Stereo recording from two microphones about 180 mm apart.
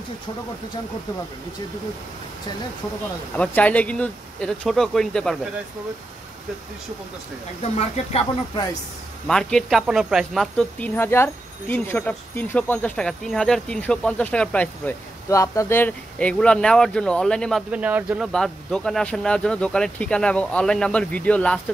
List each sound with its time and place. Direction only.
3.3 s speech: 10° left (ahead or behind)
8.0 s speech: 40° left (ahead or behind)
9.3 s speech: 5° left (ahead or behind)